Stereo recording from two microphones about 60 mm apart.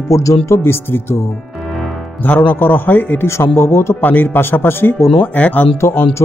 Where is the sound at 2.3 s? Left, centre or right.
Left.